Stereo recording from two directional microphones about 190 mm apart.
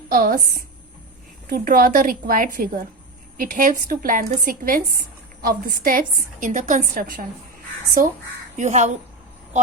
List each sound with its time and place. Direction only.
0.1 s a woman's voice: 50° right (ahead or behind)